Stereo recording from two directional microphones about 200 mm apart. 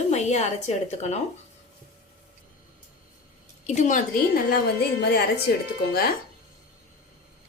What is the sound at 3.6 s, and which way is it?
Speech, 35° left (ahead or behind).